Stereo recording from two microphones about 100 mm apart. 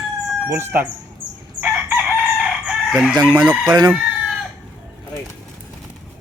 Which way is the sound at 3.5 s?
50° right (ahead or behind).